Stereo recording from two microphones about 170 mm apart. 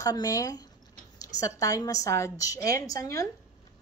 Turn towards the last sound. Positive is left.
turn(degrees=20)  # may be behind; listen again after turning